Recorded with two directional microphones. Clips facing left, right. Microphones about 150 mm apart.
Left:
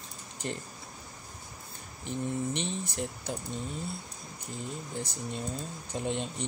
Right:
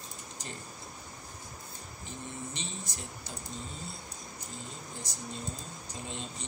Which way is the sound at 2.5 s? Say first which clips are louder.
Left 8 dB; 60° left (ahead or behind).